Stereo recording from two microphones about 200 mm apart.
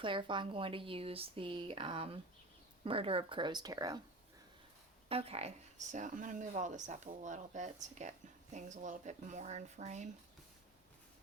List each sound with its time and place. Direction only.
0.0 s speech: 25° right (ahead or behind)
5.0 s speech: 30° right (ahead or behind)